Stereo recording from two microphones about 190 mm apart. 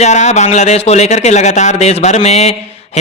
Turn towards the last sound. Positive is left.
turn(degrees=35)  # may be behind; listen again after turning